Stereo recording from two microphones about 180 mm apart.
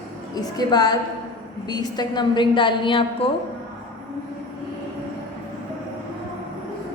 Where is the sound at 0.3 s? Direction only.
20° left (ahead or behind).